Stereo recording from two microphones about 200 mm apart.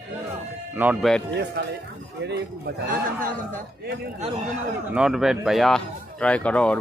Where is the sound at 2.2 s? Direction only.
55° right (ahead or behind).